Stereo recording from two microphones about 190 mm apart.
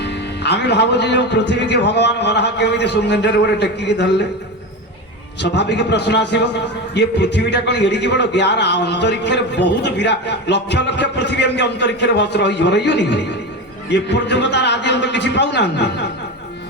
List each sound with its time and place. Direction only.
0.0 s a man's voice: 65° left (ahead or behind)
5.4 s a man's voice: 65° left (ahead or behind)